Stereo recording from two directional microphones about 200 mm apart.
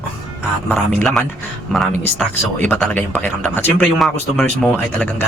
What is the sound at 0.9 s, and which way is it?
Speech, centre (ahead or behind).